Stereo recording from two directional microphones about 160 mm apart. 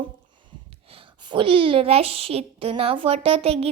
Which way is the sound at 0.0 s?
30° right (ahead or behind).